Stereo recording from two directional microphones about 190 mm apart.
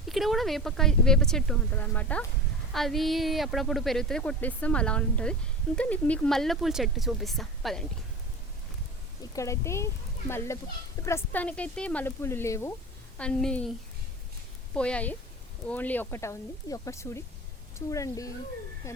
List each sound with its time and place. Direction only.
0.1 s speech: centre (ahead or behind)
9.3 s speech: 15° left (ahead or behind)
14.8 s speech: 5° left (ahead or behind)